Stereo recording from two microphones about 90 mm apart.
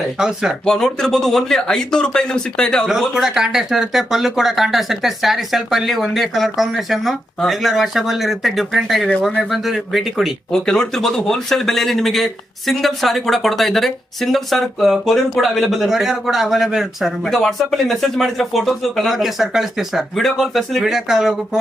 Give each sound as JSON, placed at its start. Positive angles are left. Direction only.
{"t": 0.2, "sound": "speech", "side_deg": -10}
{"t": 0.6, "sound": "speech", "side_deg": 5}
{"t": 2.9, "sound": "speech", "side_deg": -5}